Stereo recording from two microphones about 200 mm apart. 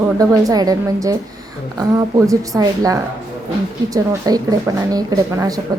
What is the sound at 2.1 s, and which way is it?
A child's voice, 15° right (ahead or behind).